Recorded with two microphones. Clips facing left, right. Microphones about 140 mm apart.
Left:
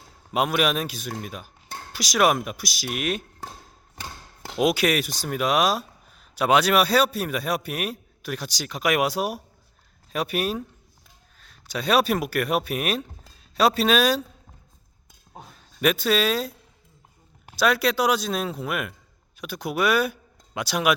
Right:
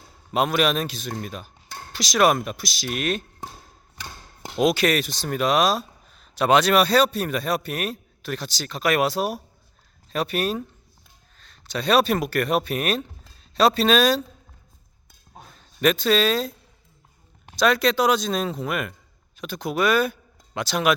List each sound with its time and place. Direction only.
0.3 s speech: 10° left (ahead or behind)
4.0 s a sound: 50° left (ahead or behind)
4.5 s speech: 10° left (ahead or behind)
15.8 s speech: 10° left (ahead or behind)